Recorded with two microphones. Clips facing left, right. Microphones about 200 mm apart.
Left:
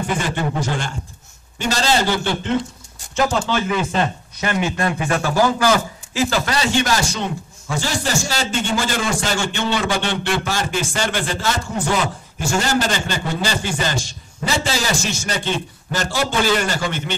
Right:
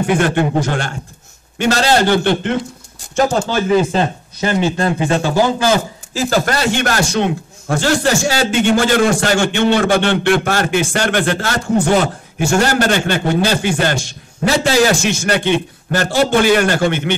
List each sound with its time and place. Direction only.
0.0 s a man's voice: 65° right (ahead or behind)
3.2 s speech: 40° right (ahead or behind); by 5.8 s 25° right (ahead or behind)
6.1 s a man's voice: 50° right (ahead or behind)